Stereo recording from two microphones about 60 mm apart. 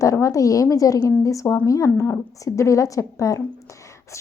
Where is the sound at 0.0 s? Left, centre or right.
Left.